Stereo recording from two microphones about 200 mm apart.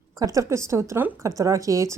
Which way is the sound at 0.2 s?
15° right (ahead or behind).